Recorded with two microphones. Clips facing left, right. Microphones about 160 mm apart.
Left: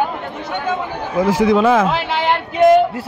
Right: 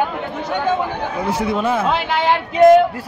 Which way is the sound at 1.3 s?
90° left.